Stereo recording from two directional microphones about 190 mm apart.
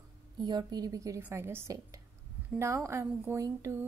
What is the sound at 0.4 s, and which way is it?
A woman's voice, 20° right (ahead or behind).